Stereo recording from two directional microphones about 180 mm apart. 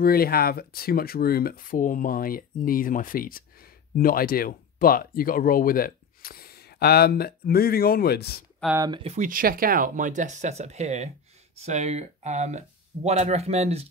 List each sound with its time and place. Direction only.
0.0 s speech: 55° left (ahead or behind)
8.7 s speech: 20° right (ahead or behind)
9.0 s speech: 40° right (ahead or behind)